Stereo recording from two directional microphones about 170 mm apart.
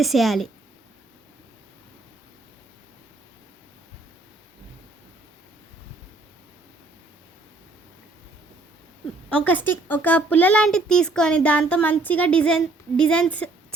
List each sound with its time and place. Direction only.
0.0 s a woman's voice: centre (ahead or behind)
9.3 s a woman's voice: 10° left (ahead or behind)